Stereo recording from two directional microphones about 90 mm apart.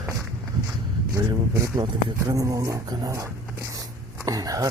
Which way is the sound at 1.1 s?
40° right (ahead or behind).